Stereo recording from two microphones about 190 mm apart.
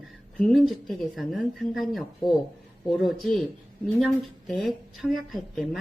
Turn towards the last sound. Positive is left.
turn(degrees=0)  # may be behind; listen again after turning